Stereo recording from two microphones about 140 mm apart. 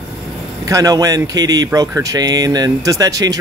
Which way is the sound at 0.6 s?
25° right (ahead or behind).